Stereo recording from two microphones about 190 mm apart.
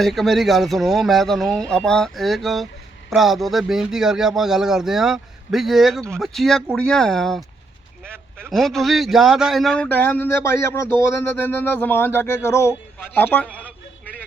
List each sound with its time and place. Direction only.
0.0 s speech: centre (ahead or behind)
8.0 s a sound: 10° right (ahead or behind)
8.4 s a man's voice: centre (ahead or behind)